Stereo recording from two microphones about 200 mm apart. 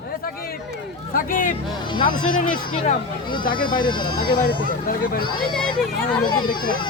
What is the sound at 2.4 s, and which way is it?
Speech, 45° left (ahead or behind).